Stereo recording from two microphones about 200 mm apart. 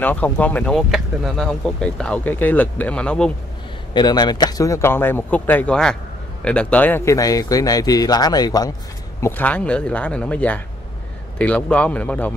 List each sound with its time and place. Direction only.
0.0 s speech: 10° left (ahead or behind)
3.9 s speech: 20° left (ahead or behind)
9.2 s speech: 10° left (ahead or behind)